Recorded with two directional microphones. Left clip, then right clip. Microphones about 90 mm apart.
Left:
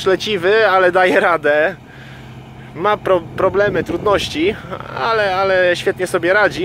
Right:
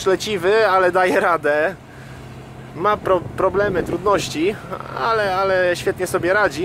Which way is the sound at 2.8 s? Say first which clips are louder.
Left 3 dB; 20° left (ahead or behind).